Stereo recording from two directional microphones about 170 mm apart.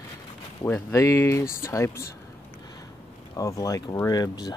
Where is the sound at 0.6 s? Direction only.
10° left (ahead or behind).